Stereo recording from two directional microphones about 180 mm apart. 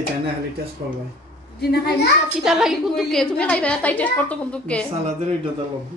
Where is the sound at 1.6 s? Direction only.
65° left (ahead or behind).